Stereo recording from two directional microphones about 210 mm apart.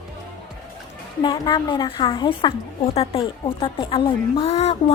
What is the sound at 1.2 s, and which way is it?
A woman's voice, 20° left (ahead or behind).